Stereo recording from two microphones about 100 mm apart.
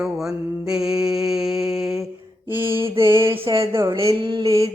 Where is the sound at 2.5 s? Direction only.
25° right (ahead or behind).